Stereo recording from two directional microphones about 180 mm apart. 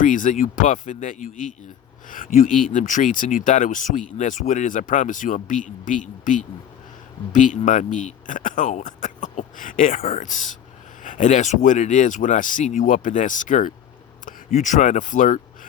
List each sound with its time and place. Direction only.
0.0 s speech: 45° left (ahead or behind)